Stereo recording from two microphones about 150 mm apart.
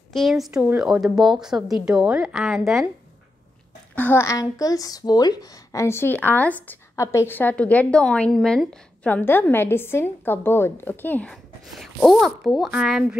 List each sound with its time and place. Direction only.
0.1 s a woman's voice: centre (ahead or behind)
3.9 s speech: 15° left (ahead or behind)
11.6 s a woman's voice: centre (ahead or behind)